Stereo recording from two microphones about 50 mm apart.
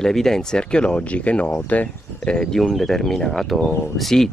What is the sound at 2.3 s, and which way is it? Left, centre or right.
Speech, centre.